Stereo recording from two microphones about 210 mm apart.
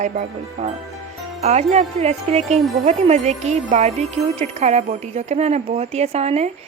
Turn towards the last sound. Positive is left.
turn(degrees=-30)  # may be behind; listen again after turning